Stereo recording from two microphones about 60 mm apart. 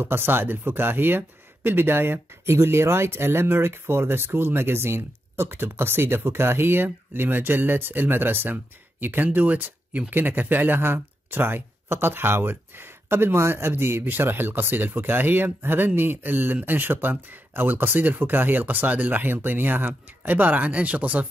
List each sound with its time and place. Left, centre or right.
0.0 s speech: right